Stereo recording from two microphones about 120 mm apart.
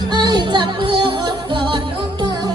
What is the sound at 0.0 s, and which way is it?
Music, 35° right (ahead or behind).